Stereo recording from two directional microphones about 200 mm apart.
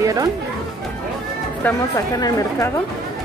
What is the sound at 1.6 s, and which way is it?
A woman's voice, 15° left (ahead or behind).